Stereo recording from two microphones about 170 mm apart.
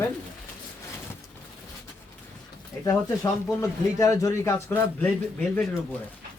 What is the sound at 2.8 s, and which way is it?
Speech, 20° left (ahead or behind).